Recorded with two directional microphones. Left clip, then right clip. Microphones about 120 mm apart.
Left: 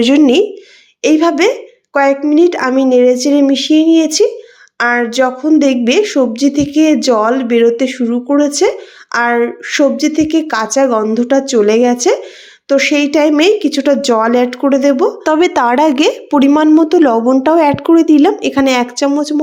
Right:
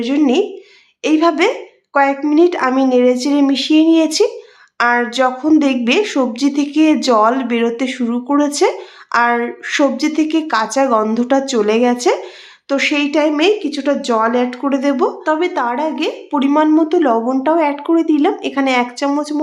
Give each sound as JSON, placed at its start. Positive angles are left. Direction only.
{"t": 0.2, "sound": "speech", "side_deg": 45}
{"t": 1.0, "sound": "a woman's voice", "side_deg": 25}
{"t": 13.1, "sound": "speech", "side_deg": 40}
{"t": 14.6, "sound": "speech", "side_deg": 30}
{"t": 15.2, "sound": "speech", "side_deg": 75}
{"t": 16.3, "sound": "speech", "side_deg": 50}
{"t": 19.1, "sound": "speech", "side_deg": 25}